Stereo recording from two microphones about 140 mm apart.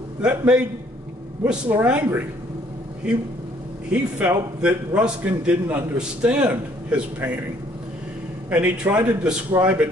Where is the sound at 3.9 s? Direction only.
10° right (ahead or behind).